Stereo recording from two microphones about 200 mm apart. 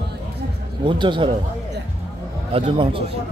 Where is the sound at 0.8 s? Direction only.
25° right (ahead or behind).